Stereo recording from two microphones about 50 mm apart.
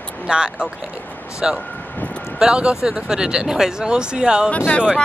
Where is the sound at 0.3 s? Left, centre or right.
Centre.